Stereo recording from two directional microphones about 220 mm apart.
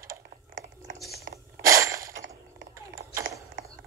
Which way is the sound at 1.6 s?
15° right (ahead or behind).